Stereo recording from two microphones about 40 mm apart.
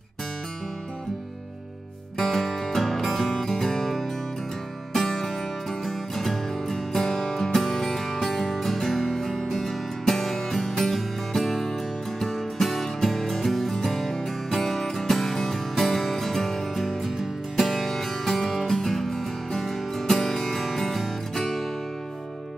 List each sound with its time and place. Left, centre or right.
2.1 s music: centre